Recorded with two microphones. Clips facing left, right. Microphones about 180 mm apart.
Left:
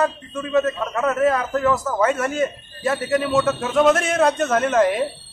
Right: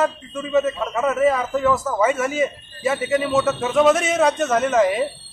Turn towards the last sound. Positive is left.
turn(degrees=0)  # may be behind; listen again after turning